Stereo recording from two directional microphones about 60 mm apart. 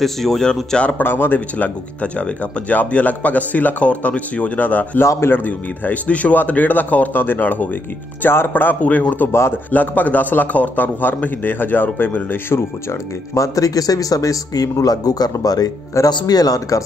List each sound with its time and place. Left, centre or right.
0.0 s speech: centre
0.7 s speech: left
1.0 s a man's voice: left
5.0 s speech: left
5.3 s a man's voice: left
13.3 s speech: left